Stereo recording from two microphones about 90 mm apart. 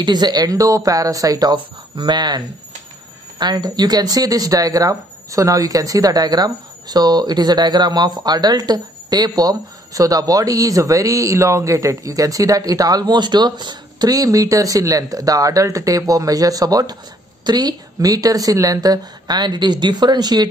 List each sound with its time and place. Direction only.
0.0 s speech: 55° right (ahead or behind)